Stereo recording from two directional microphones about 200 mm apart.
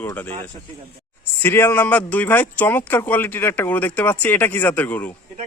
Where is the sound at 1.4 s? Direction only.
10° left (ahead or behind).